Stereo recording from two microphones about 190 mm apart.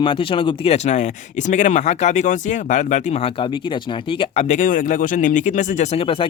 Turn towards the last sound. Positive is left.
turn(degrees=30)  # may be behind; listen again after turning